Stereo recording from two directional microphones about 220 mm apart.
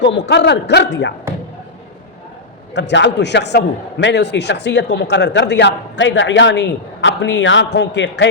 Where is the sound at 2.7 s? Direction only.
55° left (ahead or behind).